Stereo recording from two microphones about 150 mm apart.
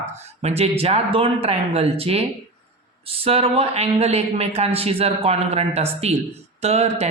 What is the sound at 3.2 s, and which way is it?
Speech, 40° right (ahead or behind).